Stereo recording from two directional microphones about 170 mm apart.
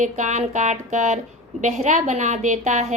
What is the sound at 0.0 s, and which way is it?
A woman's voice, 45° right (ahead or behind).